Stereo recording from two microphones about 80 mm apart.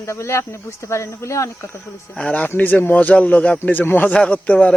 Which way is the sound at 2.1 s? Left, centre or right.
Centre.